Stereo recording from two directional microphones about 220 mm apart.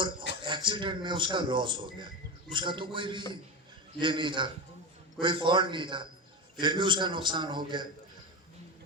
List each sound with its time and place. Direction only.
0.4 s a man's voice: 20° right (ahead or behind)